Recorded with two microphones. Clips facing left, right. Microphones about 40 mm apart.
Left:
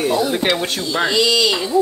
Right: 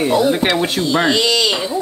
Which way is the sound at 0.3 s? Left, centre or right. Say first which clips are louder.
Right 3 dB; centre.